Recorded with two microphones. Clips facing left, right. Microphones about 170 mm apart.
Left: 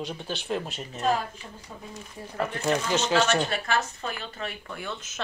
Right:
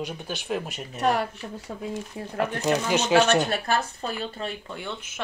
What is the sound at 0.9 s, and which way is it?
Speech, 75° right (ahead or behind).